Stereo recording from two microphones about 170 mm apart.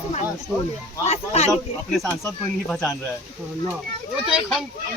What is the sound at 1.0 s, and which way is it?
Speech, 40° left (ahead or behind).